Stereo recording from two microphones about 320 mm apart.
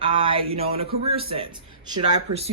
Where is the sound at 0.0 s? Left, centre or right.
Centre.